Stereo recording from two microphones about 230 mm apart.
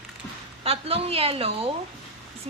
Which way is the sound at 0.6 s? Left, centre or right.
Right.